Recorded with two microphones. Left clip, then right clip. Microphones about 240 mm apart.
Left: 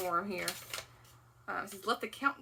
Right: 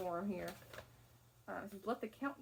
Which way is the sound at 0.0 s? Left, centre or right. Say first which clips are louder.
Left 8 dB; centre.